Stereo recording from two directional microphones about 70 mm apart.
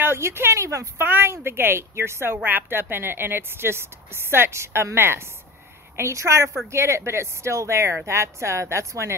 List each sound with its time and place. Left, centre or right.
0.0 s speech: right
1.0 s a woman's voice: right